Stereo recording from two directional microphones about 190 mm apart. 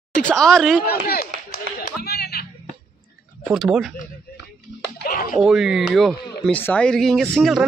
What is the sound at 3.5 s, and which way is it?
Speech, centre (ahead or behind).